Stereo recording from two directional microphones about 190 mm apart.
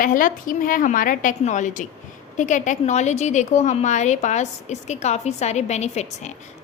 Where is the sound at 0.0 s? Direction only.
45° left (ahead or behind).